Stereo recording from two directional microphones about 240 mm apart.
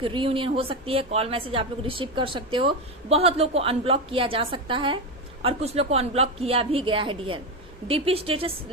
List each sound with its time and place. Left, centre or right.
0.0 s a woman's voice: right